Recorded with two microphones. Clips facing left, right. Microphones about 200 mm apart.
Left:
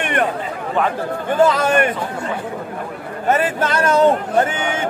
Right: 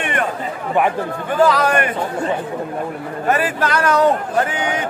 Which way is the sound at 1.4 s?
25° left (ahead or behind).